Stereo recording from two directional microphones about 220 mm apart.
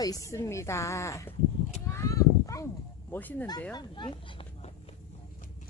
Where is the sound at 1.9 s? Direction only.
15° left (ahead or behind).